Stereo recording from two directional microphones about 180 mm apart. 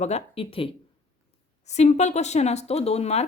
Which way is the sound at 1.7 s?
40° left (ahead or behind).